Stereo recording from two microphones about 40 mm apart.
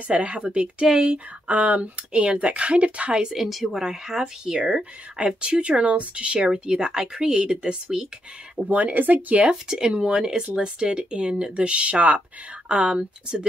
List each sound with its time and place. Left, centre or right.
0.1 s a woman's voice: right
1.5 s a woman's voice: right
3.3 s a woman's voice: centre; by 8.0 s right
8.6 s a woman's voice: right
9.4 s speech: right